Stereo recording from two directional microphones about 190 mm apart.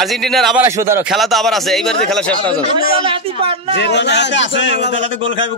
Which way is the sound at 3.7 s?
65° left (ahead or behind).